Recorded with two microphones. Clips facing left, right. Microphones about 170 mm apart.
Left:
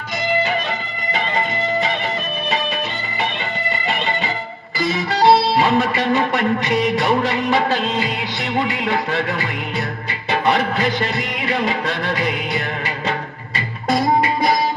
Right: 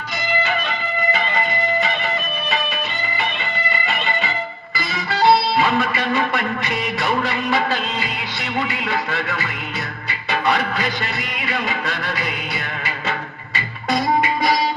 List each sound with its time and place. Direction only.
5.3 s music: 20° left (ahead or behind)
8.8 s music: 25° left (ahead or behind)
10.4 s music: 25° left (ahead or behind)
13.9 s music: 40° left (ahead or behind)